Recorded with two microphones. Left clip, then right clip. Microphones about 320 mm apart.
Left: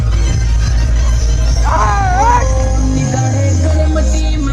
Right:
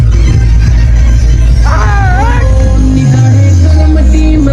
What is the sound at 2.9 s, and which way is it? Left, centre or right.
Music, left.